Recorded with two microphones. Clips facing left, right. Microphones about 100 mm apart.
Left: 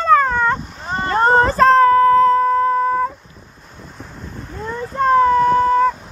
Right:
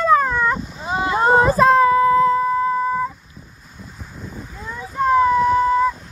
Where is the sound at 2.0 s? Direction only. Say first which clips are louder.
Left 3 dB; 55° left (ahead or behind).